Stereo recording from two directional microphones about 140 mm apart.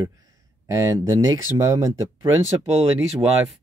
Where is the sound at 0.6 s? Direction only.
20° right (ahead or behind).